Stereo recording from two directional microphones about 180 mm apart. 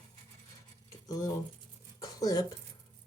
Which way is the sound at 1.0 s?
20° left (ahead or behind).